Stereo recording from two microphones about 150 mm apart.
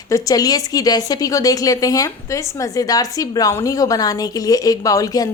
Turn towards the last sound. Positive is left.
turn(degrees=25)  # may be behind; listen again after turning